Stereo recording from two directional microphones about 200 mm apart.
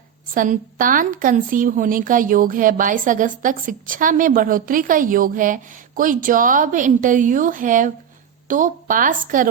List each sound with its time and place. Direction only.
0.3 s a woman's voice: 40° right (ahead or behind)